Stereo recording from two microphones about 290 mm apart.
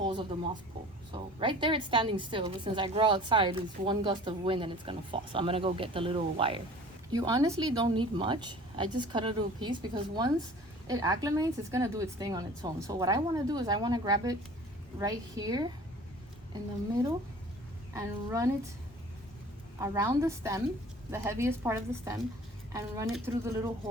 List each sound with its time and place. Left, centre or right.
0.0 s a woman's voice: centre
17.9 s a woman's voice: centre
19.8 s a woman's voice: centre